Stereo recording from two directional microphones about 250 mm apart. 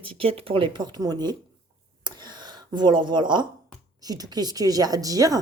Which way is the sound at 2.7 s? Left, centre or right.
Centre.